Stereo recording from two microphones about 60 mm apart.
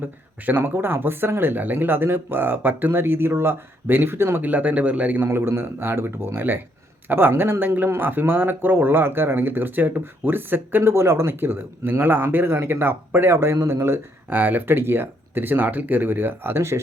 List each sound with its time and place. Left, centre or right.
0.4 s speech: right
4.4 s speech: right
13.3 s a man's voice: right
14.3 s speech: right